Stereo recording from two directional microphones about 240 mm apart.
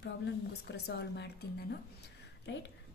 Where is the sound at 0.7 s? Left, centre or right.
Left.